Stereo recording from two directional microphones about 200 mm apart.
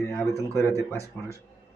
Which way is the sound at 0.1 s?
15° left (ahead or behind).